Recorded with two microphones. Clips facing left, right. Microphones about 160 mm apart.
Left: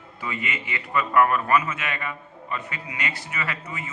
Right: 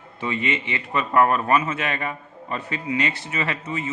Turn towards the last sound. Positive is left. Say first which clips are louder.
# right 6 dB
turn(degrees=-25)  # may be behind; listen again after turning